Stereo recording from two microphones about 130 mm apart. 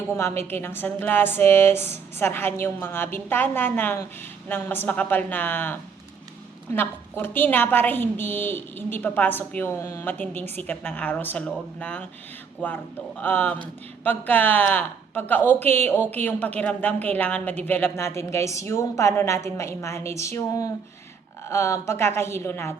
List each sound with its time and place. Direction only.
0.1 s a woman's voice: 20° left (ahead or behind)